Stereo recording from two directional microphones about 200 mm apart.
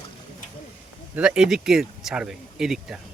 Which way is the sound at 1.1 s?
5° right (ahead or behind).